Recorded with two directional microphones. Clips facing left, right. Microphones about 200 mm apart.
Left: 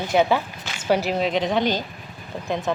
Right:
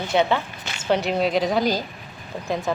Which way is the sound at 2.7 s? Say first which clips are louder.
Left 1 dB; 5° right (ahead or behind).